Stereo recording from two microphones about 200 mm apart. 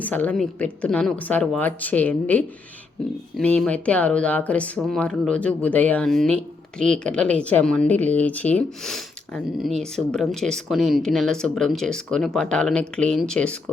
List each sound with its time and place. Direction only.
0.0 s speech: 10° left (ahead or behind)